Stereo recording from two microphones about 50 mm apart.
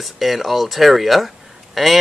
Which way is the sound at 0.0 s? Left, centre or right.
Centre.